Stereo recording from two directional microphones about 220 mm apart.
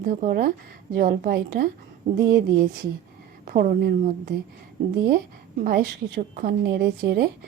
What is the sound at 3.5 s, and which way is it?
Speech, 40° right (ahead or behind).